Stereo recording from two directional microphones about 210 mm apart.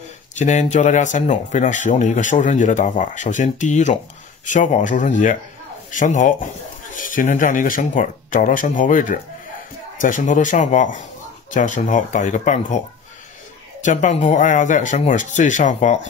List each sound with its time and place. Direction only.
0.4 s speech: 35° left (ahead or behind)
13.8 s speech: 35° left (ahead or behind)